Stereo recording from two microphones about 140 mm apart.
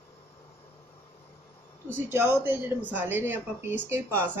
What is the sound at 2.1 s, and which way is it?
Speech, 15° right (ahead or behind).